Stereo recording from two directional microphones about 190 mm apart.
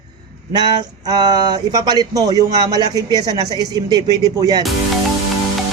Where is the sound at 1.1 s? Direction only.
20° right (ahead or behind).